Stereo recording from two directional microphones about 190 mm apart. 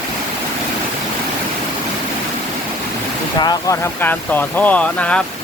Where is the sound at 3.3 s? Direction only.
20° left (ahead or behind).